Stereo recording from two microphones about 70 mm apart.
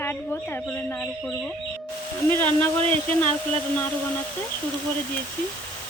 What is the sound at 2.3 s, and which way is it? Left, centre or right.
Speech, left.